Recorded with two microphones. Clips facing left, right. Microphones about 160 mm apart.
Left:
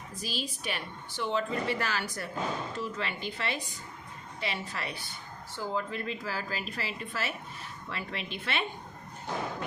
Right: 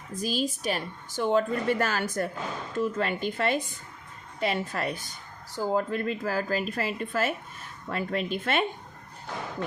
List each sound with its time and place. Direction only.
0.2 s a woman's voice: 45° right (ahead or behind)